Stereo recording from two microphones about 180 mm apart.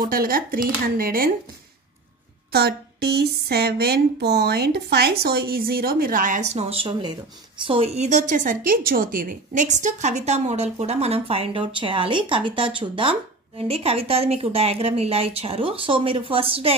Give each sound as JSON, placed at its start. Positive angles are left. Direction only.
{"t": 0.0, "sound": "speech", "side_deg": -50}
{"t": 2.5, "sound": "a woman's voice", "side_deg": -60}